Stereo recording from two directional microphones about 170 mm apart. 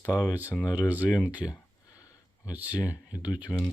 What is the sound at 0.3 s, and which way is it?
Speech, 10° right (ahead or behind).